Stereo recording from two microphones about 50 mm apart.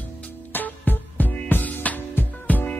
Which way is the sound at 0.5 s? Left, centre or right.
Left.